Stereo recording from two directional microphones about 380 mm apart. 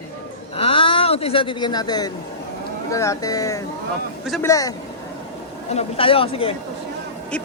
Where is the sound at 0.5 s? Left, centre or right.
Centre.